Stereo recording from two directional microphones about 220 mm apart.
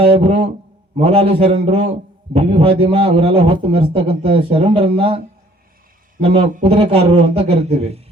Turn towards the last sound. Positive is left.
turn(degrees=-30)  # may be behind; listen again after turning